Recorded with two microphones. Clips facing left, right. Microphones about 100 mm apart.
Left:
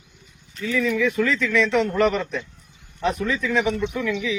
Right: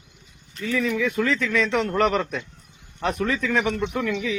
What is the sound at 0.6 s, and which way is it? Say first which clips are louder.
Speech: left 2 dB; 40° right (ahead or behind).